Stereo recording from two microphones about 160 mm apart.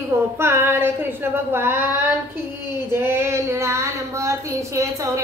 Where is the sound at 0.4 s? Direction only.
15° right (ahead or behind).